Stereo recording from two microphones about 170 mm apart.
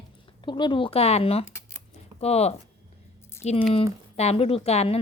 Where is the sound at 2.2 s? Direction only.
40° left (ahead or behind).